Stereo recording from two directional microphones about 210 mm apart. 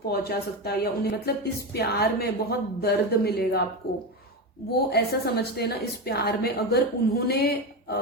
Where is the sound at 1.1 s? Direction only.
50° left (ahead or behind).